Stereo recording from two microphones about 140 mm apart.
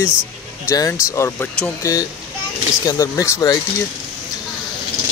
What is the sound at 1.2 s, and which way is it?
Speech, 15° left (ahead or behind).